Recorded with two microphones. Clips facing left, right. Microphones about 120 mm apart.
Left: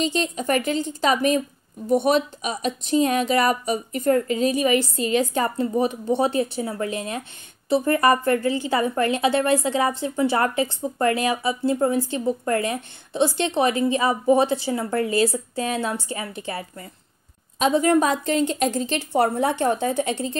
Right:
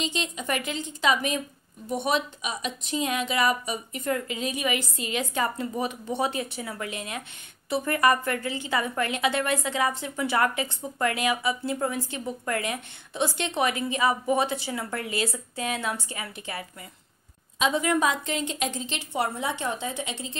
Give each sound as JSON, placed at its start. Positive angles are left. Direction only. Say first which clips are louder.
{"t": 0.0, "sound": "a woman's voice", "louder": "left 7 dB", "side_deg": 40}